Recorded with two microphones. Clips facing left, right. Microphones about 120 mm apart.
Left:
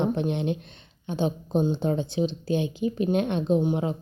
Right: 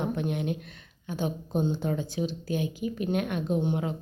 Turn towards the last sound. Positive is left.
turn(degrees=25)  # may be behind; listen again after turning